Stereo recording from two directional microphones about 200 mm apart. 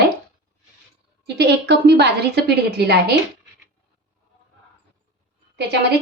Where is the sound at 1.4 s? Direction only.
55° right (ahead or behind).